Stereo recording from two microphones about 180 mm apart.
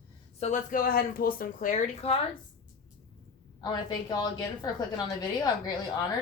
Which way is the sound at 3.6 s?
25° left (ahead or behind).